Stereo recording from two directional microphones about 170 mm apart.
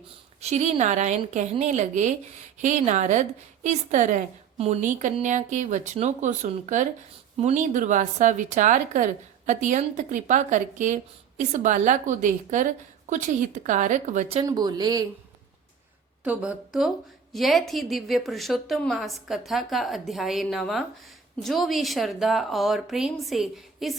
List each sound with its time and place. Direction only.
0.3 s a woman's voice: 40° right (ahead or behind)
14.4 s speech: 25° right (ahead or behind)
16.2 s a woman's voice: 5° right (ahead or behind)